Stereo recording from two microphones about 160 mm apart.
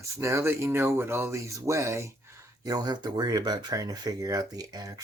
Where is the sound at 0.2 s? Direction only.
15° right (ahead or behind).